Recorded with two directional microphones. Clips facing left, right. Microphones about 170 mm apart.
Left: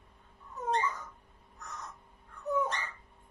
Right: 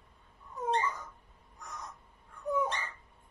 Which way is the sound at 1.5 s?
10° right (ahead or behind).